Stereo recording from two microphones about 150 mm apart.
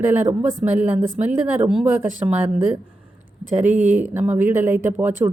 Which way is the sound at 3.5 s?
15° right (ahead or behind).